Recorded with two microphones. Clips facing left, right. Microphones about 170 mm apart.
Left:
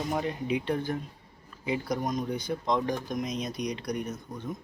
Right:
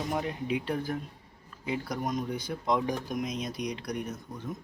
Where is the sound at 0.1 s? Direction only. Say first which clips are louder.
Left 2 dB; centre (ahead or behind).